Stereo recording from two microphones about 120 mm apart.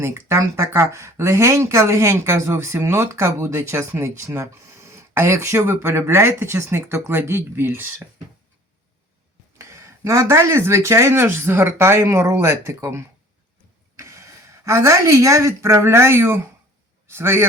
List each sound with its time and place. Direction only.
0.0 s speech: 20° right (ahead or behind)
9.6 s a woman's voice: 25° right (ahead or behind)